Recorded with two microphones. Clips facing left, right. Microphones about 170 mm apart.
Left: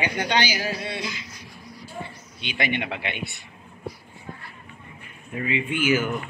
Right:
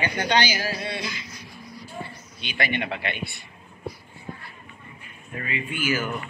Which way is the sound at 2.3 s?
20° left (ahead or behind).